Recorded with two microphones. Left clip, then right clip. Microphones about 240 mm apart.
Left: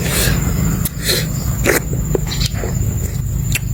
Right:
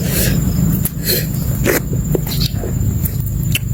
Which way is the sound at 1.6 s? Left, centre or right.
Centre.